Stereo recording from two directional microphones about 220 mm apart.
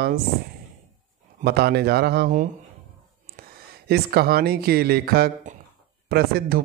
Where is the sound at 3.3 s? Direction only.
40° right (ahead or behind).